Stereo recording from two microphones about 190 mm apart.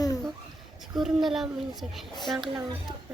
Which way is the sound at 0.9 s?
Centre (ahead or behind).